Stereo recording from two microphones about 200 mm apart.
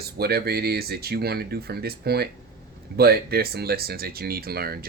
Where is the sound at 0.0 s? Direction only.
50° right (ahead or behind).